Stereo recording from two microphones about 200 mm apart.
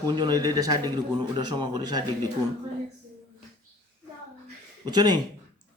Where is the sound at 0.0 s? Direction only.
20° right (ahead or behind).